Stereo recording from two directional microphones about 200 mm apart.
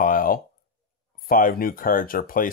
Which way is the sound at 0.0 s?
45° left (ahead or behind).